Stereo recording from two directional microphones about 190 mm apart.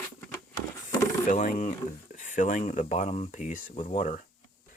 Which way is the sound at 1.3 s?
40° left (ahead or behind).